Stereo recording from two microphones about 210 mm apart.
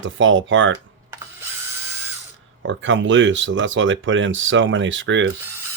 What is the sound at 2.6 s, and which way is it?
Speech, 60° right (ahead or behind).